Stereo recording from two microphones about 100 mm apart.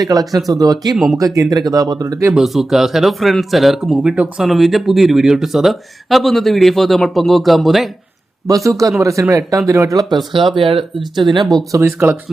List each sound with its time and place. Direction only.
0.0 s speech: 40° right (ahead or behind)
0.9 s speech: centre (ahead or behind)
1.2 s speech: 35° right (ahead or behind)
2.3 s speech: centre (ahead or behind)
4.4 s speech: centre (ahead or behind)
8.4 s speech: 35° right (ahead or behind)
10.3 s speech: 55° right (ahead or behind)
11.8 s speech: 20° right (ahead or behind)